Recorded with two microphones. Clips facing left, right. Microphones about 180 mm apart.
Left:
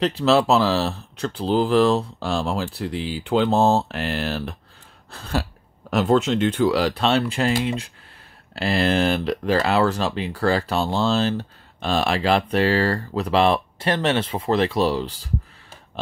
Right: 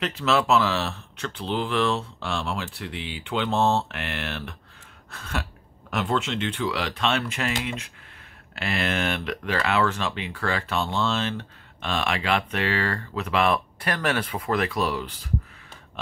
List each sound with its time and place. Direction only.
0.0 s speech: 35° left (ahead or behind)